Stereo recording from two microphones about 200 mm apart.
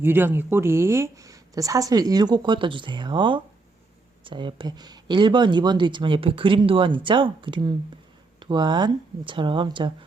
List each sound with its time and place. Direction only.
0.0 s speech: 10° right (ahead or behind)